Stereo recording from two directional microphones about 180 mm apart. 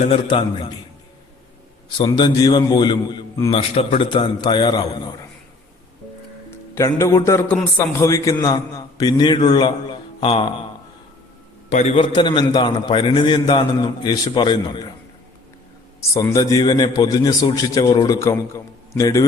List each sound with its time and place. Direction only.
0.3 s a man's voice: 30° left (ahead or behind)
2.0 s a man's voice: 25° left (ahead or behind)
3.5 s a man's voice: 35° left (ahead or behind)
6.7 s a man's voice: 15° left (ahead or behind)
11.7 s a man's voice: 35° left (ahead or behind)
16.0 s a man's voice: 20° left (ahead or behind)